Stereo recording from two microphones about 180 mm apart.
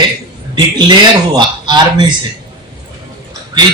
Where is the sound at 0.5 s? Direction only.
25° right (ahead or behind).